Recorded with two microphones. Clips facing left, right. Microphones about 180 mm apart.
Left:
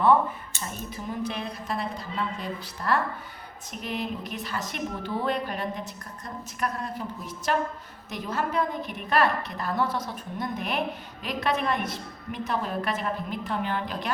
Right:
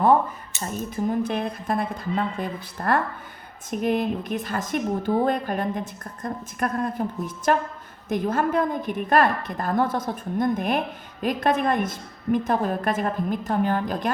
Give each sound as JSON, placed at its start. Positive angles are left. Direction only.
{"t": 0.6, "sound": "a woman's voice", "side_deg": -50}